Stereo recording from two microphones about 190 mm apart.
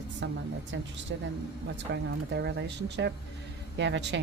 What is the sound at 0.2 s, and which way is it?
Speech, 75° right (ahead or behind).